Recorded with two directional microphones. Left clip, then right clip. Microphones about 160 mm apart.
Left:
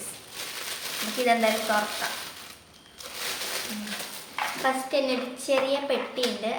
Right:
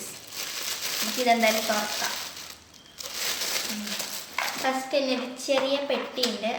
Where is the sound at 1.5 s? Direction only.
Centre (ahead or behind).